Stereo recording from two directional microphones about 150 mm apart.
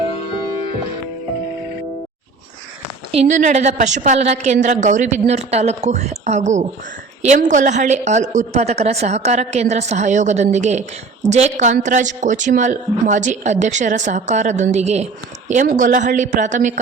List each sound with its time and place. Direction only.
3.1 s a woman's voice: 50° right (ahead or behind)
15.7 s speech: 60° right (ahead or behind)